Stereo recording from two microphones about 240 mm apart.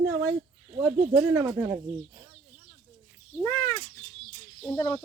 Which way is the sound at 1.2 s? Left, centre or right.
Centre.